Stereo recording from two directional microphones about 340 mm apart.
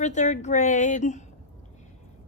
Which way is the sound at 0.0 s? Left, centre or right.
Left.